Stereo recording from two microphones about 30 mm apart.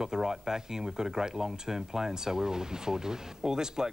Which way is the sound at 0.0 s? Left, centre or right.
Centre.